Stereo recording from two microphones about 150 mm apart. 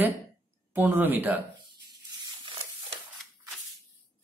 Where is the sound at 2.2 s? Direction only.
30° right (ahead or behind).